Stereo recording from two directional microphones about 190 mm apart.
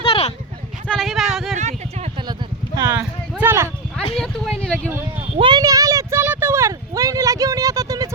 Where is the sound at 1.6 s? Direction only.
35° right (ahead or behind).